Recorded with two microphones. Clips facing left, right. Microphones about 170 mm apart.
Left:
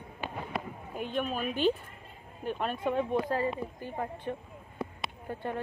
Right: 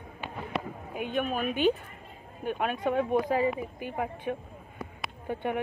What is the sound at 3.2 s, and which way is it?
Speech, 15° right (ahead or behind).